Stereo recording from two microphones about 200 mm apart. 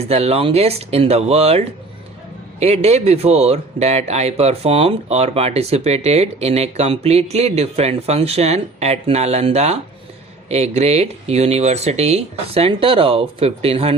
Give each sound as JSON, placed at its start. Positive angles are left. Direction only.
{"t": 0.0, "sound": "speech", "side_deg": -30}